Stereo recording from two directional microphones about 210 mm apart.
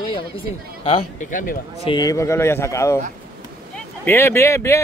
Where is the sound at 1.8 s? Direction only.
20° left (ahead or behind).